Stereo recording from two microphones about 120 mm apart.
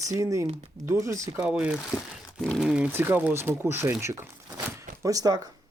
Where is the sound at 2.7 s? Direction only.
15° right (ahead or behind); by 5.5 s 30° right (ahead or behind).